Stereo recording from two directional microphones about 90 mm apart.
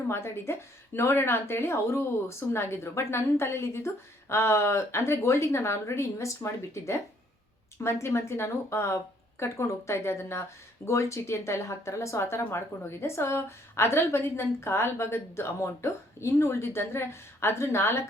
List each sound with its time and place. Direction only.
0.1 s speech: 30° left (ahead or behind)